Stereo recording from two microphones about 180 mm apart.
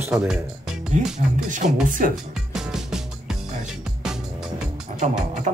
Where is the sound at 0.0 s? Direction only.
5° right (ahead or behind).